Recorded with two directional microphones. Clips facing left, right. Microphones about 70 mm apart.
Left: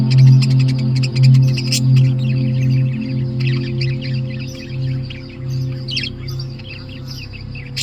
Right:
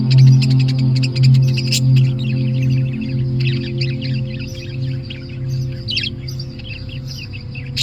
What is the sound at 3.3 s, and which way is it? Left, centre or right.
Bird, centre.